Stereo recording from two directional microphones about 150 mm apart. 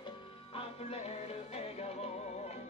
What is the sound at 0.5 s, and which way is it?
Music, 45° left (ahead or behind).